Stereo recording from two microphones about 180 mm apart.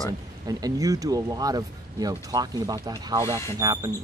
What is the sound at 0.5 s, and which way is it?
Speech, 20° right (ahead or behind).